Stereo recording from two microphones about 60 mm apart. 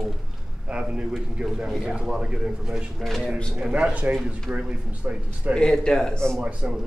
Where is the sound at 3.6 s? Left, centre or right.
Centre.